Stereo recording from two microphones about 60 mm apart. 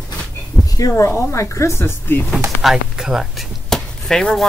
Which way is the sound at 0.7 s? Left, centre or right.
Left.